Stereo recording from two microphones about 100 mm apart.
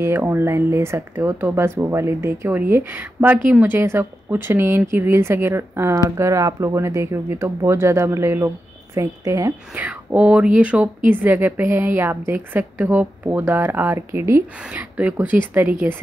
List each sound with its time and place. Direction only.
0.0 s speech: 25° right (ahead or behind)
9.8 s speech: 15° right (ahead or behind)
14.6 s speech: 15° right (ahead or behind)